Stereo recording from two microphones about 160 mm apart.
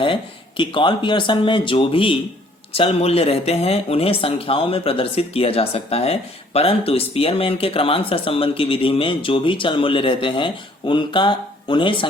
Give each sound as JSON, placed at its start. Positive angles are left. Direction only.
{"t": 0.0, "sound": "speech", "side_deg": 30}